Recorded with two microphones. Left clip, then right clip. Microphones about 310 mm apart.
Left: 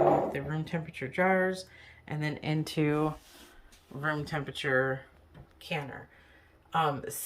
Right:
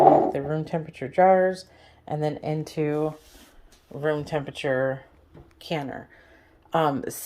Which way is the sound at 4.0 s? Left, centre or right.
Left.